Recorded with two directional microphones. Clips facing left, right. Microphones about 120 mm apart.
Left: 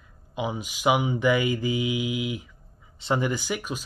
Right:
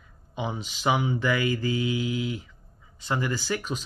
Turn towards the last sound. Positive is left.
turn(degrees=10)  # may be behind; listen again after turning